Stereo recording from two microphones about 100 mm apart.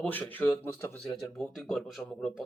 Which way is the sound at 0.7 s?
30° left (ahead or behind).